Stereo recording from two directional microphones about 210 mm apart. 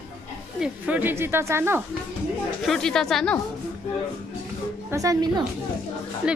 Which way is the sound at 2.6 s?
Centre (ahead or behind).